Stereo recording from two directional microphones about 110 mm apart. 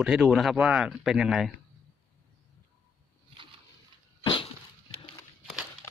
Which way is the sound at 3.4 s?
50° right (ahead or behind).